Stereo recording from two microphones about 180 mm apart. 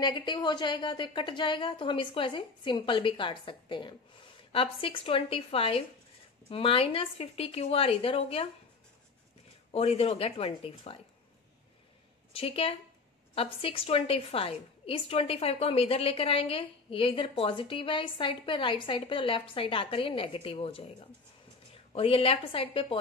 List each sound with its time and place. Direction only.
0.0 s a woman's voice: 25° left (ahead or behind)
9.7 s a woman's voice: 35° left (ahead or behind)
12.3 s a woman's voice: 30° left (ahead or behind)
21.9 s a woman's voice: 30° left (ahead or behind)